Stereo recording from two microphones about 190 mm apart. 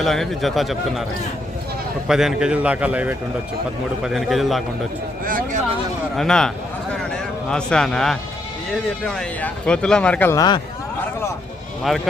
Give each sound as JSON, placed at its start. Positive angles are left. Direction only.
{"t": 0.0, "sound": "a man's voice", "side_deg": 0}
{"t": 2.0, "sound": "a man's voice", "side_deg": -5}
{"t": 5.2, "sound": "a sound", "side_deg": -45}
{"t": 6.1, "sound": "a man's voice", "side_deg": 5}
{"t": 7.5, "sound": "a man's voice", "side_deg": 5}
{"t": 11.9, "sound": "a man's voice", "side_deg": 0}